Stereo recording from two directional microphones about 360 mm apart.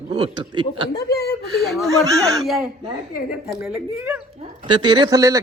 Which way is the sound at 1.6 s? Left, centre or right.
Centre.